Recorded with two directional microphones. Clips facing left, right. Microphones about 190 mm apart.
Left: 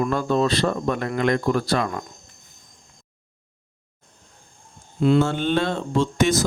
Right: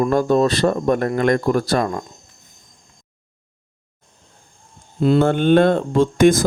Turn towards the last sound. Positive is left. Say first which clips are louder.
# right 6 dB
turn(degrees=-50)  # may be behind; listen again after turning